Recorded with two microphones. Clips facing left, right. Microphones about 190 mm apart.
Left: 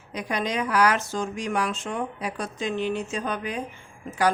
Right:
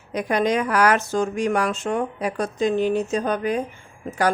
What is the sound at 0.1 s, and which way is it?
Speech, 50° right (ahead or behind).